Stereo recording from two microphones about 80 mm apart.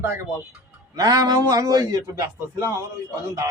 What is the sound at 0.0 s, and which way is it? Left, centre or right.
Speech, right.